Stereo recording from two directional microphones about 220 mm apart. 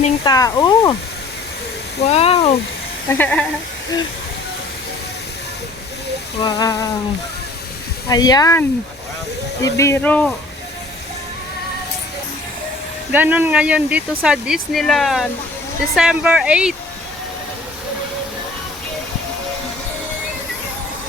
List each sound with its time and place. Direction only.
0.3 s speech: 15° left (ahead or behind)
2.0 s speech: 25° left (ahead or behind)
3.1 s speech: 5° left (ahead or behind)
6.4 s speech: 15° left (ahead or behind)
8.1 s speech: 15° left (ahead or behind)
9.6 s speech: 15° left (ahead or behind)
13.1 s speech: 5° right (ahead or behind)